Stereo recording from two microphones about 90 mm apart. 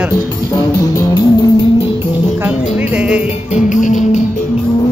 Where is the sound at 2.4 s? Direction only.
20° right (ahead or behind).